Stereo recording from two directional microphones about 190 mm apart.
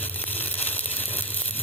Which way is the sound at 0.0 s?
10° left (ahead or behind).